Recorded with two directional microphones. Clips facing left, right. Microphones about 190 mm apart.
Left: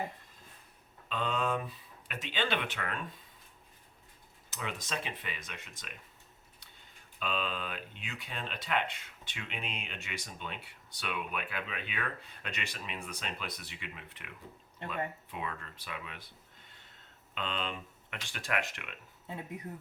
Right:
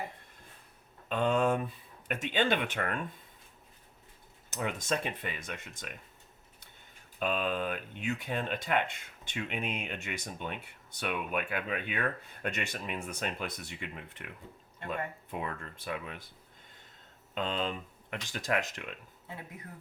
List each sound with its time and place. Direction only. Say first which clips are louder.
1.0 s speech: right 6 dB; 50° right (ahead or behind)
4.5 s speech: right 6 dB; 45° right (ahead or behind)
7.2 s speech: right 5 dB; 50° right (ahead or behind)
17.3 s speech: right 4 dB; 40° right (ahead or behind)